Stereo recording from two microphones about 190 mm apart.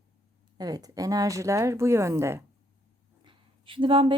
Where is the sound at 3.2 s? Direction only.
25° right (ahead or behind).